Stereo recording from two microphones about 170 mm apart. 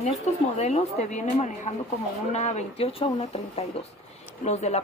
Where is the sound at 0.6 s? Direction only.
40° left (ahead or behind).